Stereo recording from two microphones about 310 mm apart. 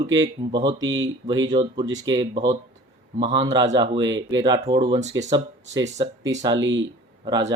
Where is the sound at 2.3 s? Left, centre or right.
Centre.